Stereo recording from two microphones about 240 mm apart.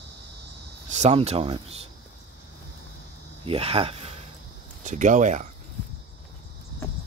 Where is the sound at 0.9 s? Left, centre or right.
Right.